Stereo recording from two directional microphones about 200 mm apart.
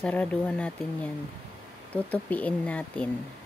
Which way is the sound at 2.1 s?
5° left (ahead or behind).